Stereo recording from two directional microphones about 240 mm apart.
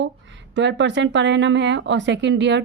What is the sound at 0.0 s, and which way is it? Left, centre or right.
Speech, right.